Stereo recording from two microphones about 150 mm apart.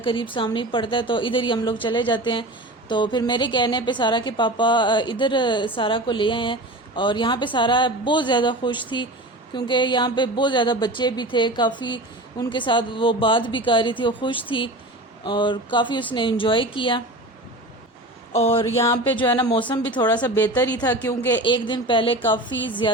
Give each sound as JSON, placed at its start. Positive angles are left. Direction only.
{"t": 0.0, "sound": "a woman's voice", "side_deg": 35}
{"t": 18.3, "sound": "speech", "side_deg": 40}
{"t": 18.6, "sound": "a sound", "side_deg": 20}
{"t": 19.4, "sound": "a woman's voice", "side_deg": 30}
{"t": 20.1, "sound": "a woman's voice", "side_deg": 15}
{"t": 21.0, "sound": "a sound", "side_deg": 20}
{"t": 21.4, "sound": "a woman's voice", "side_deg": 30}